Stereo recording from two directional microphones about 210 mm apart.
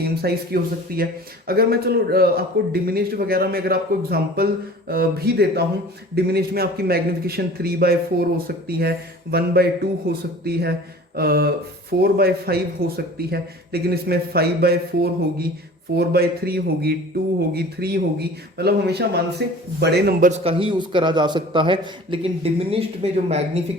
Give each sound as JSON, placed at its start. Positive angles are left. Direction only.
{"t": 0.0, "sound": "a man's voice", "side_deg": -50}
{"t": 20.3, "sound": "a man's voice", "side_deg": -25}